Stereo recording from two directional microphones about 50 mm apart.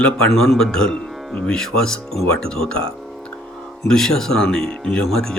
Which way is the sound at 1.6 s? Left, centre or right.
Centre.